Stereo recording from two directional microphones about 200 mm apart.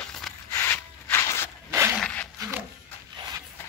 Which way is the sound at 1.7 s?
10° right (ahead or behind).